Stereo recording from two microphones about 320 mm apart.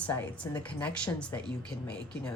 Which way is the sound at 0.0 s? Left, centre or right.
Centre.